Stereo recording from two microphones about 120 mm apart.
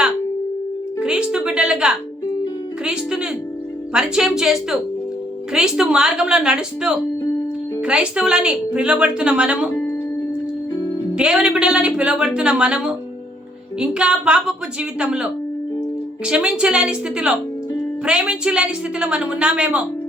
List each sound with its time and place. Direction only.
0.9 s music: 5° right (ahead or behind)
2.8 s a woman's voice: 5° right (ahead or behind)
9.6 s music: 15° left (ahead or behind)
11.1 s speech: 5° right (ahead or behind)